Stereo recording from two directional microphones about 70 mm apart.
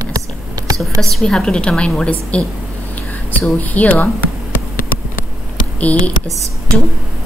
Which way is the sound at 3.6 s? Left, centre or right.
Left.